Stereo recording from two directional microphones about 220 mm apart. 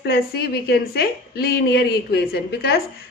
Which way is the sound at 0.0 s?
45° left (ahead or behind).